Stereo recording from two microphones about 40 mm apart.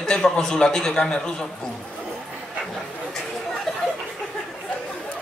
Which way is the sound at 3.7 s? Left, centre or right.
Centre.